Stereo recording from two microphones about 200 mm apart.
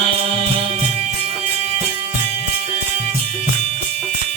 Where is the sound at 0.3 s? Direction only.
25° right (ahead or behind).